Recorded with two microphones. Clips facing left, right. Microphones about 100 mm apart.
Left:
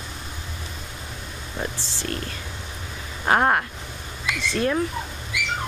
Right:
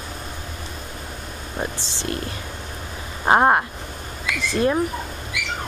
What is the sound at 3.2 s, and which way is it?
Speech, 20° right (ahead or behind).